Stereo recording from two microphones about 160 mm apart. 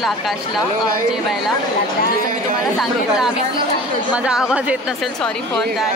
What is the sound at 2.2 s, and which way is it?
Speech, 55° right (ahead or behind).